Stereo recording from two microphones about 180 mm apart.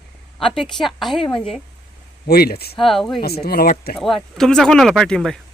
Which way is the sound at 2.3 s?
60° left (ahead or behind).